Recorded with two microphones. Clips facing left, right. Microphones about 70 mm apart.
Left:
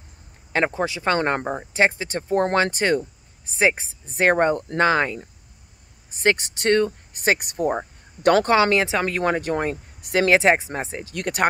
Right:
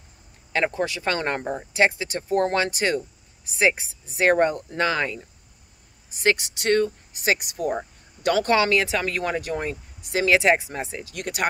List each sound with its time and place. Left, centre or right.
0.7 s speech: left
8.5 s speech: left
10.0 s speech: left
10.3 s speech: left
11.1 s speech: left